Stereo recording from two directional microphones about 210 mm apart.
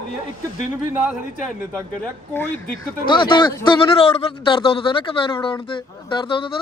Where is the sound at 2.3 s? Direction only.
5° left (ahead or behind).